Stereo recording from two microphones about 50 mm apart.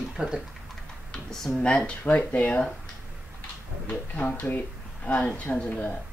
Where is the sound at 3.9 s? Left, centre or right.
Left.